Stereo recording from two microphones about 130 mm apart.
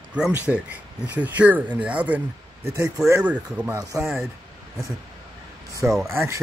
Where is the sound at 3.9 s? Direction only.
25° right (ahead or behind).